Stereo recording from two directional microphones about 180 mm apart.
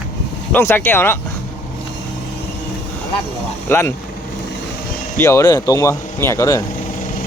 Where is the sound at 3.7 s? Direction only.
15° left (ahead or behind).